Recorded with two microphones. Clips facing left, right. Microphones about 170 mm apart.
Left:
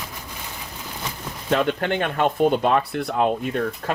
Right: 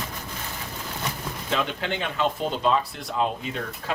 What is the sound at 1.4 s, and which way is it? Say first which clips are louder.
Speech: left 7 dB; 50° left (ahead or behind).